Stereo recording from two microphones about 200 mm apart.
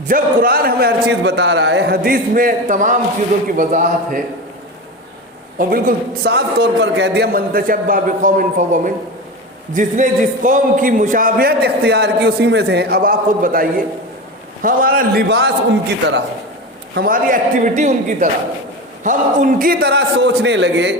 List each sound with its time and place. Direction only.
0.1 s a man's voice: 45° right (ahead or behind)
5.5 s a man's voice: 45° right (ahead or behind)
16.9 s a man's voice: 45° right (ahead or behind); by 20.9 s 65° right (ahead or behind)